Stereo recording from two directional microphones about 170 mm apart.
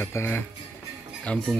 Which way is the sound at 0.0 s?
15° left (ahead or behind).